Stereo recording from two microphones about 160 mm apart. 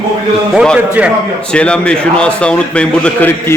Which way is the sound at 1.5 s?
5° left (ahead or behind).